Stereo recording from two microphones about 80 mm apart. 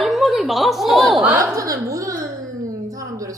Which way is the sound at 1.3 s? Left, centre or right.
Right.